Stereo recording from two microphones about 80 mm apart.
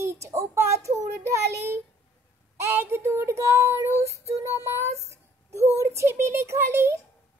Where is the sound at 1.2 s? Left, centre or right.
Right.